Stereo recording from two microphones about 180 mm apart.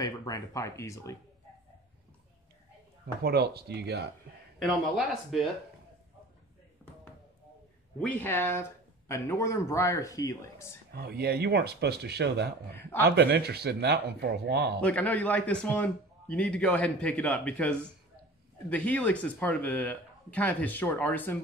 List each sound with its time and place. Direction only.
0.0 s speech: 20° left (ahead or behind)
3.2 s speech: 60° right (ahead or behind)
4.6 s speech: centre (ahead or behind)
6.8 s basketball bounce: 5° left (ahead or behind)
8.0 s a man's voice: 10° left (ahead or behind)
10.9 s speech: 60° right (ahead or behind)
14.8 s a man's voice: 10° left (ahead or behind)